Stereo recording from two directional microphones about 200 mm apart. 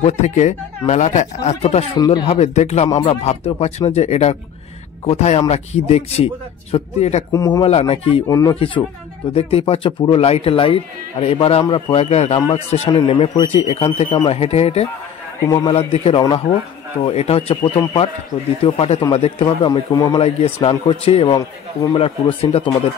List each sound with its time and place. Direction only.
0.0 s speech: 35° left (ahead or behind)
2.0 s speech: 20° left (ahead or behind)
2.2 s speech: 35° left (ahead or behind)
7.3 s speech: 20° left (ahead or behind)
7.6 s speech: 30° left (ahead or behind)
8.3 s speech: 15° left (ahead or behind)
15.4 s speech: 15° left (ahead or behind)
15.9 s speech: 30° left (ahead or behind)